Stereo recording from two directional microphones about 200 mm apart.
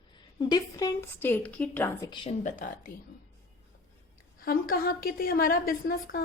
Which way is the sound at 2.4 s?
40° left (ahead or behind).